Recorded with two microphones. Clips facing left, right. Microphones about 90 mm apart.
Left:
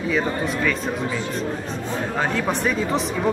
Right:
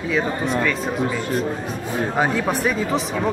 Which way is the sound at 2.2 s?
10° right (ahead or behind).